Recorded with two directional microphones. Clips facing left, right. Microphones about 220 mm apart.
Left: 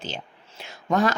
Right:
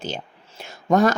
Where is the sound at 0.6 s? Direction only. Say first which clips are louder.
Right 5 dB; 45° right (ahead or behind).